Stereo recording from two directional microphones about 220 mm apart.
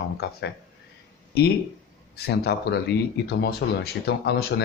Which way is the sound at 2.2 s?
45° left (ahead or behind).